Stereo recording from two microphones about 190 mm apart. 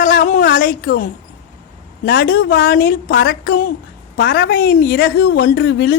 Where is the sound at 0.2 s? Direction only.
45° left (ahead or behind).